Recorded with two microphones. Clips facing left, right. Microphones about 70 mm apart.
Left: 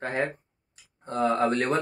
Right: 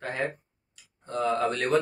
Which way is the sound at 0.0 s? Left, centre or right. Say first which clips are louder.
Left 3 dB; left.